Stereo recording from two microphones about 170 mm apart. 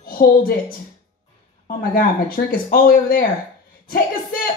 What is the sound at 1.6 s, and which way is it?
Speech, 55° left (ahead or behind).